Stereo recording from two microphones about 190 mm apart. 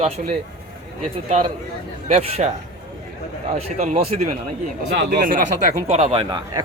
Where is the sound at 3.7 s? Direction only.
35° right (ahead or behind).